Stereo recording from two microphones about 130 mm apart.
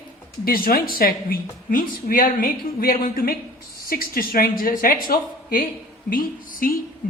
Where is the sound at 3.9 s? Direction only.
90° left.